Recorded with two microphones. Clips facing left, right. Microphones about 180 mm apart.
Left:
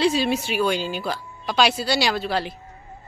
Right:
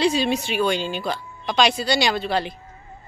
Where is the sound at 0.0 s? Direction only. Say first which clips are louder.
Even; 5° left (ahead or behind).